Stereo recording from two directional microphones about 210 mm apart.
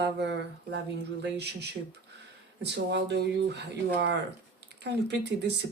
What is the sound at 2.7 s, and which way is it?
Speech, 55° right (ahead or behind).